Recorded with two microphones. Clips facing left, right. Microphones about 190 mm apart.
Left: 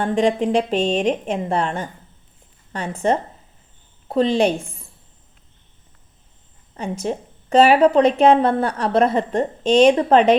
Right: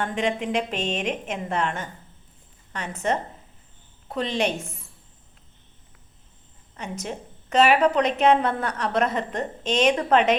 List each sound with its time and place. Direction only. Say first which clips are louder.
0.0 s a woman's voice: left 7 dB; 35° left (ahead or behind)
6.7 s a woman's voice: left 8 dB; 30° left (ahead or behind)